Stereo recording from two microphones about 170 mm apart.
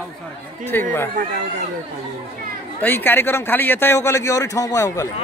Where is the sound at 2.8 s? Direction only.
10° left (ahead or behind).